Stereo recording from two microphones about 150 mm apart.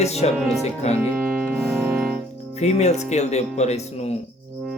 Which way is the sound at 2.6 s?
45° left (ahead or behind).